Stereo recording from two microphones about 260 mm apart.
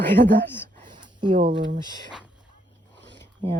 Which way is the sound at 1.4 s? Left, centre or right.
Right.